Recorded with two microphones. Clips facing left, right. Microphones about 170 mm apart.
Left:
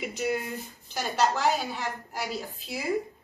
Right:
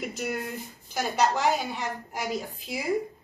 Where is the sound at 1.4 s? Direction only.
20° right (ahead or behind).